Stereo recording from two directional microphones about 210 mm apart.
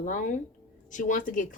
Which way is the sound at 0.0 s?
35° left (ahead or behind).